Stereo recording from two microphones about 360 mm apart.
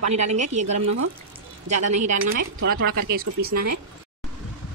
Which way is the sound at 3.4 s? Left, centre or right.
Right.